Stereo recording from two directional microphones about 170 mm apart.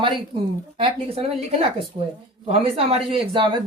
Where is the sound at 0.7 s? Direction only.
35° right (ahead or behind).